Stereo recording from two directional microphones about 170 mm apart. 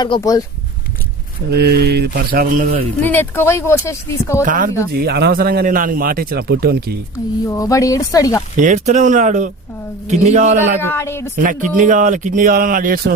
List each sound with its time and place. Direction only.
0.0 s speech: 25° left (ahead or behind)
1.5 s speech: 70° right (ahead or behind); by 2.8 s 50° right (ahead or behind)
3.0 s speech: 10° left (ahead or behind)
4.4 s speech: 55° right (ahead or behind)
4.9 s a man's voice: 65° right (ahead or behind)
7.4 s speech: 20° left (ahead or behind)
8.5 s speech: 50° right (ahead or behind)
10.8 s speech: 15° left (ahead or behind)
11.4 s speech: 50° right (ahead or behind)